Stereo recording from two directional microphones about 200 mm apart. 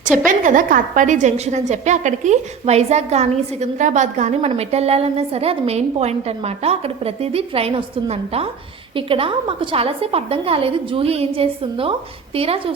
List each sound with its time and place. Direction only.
0.3 s a woman's voice: 40° right (ahead or behind)